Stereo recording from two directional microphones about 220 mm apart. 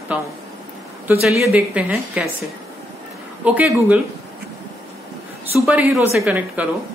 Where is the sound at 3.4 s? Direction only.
5° right (ahead or behind).